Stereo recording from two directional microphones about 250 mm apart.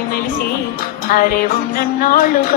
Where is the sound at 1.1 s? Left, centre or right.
Left.